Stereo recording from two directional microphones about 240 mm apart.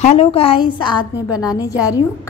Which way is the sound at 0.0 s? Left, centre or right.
Left.